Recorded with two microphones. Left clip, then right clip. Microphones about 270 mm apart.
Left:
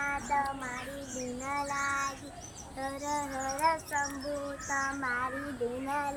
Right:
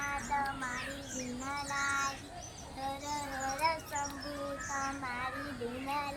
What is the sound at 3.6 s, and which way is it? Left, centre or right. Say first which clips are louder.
Child singing: left 5 dB; centre.